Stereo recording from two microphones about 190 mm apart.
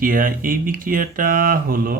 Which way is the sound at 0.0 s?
45° right (ahead or behind).